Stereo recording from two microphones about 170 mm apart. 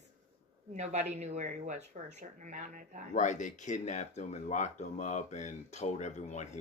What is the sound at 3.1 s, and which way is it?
Speech, 45° left (ahead or behind).